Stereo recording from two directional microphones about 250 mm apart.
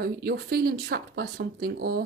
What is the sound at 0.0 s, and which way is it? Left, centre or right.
Speech, right.